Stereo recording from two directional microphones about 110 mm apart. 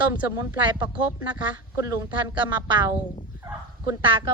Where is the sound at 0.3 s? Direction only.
40° right (ahead or behind).